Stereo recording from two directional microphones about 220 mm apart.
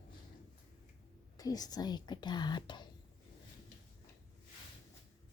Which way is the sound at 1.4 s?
15° left (ahead or behind).